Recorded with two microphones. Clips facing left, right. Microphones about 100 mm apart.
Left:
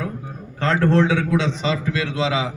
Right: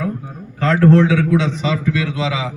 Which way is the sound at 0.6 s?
30° left (ahead or behind).